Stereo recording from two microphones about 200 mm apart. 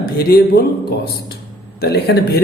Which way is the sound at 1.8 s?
55° left (ahead or behind).